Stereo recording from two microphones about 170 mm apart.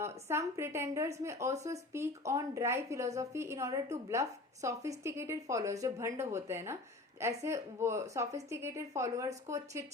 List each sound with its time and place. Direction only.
0.0 s a woman's voice: 15° right (ahead or behind)